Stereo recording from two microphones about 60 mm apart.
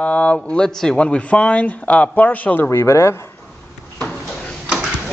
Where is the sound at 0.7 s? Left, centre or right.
Centre; by 2.7 s left.